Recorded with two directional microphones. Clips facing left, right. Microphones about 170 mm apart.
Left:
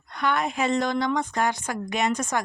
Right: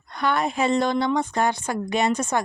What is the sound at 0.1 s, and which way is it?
A woman's voice, 35° right (ahead or behind).